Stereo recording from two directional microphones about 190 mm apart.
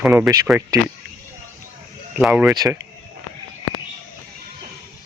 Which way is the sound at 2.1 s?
5° right (ahead or behind).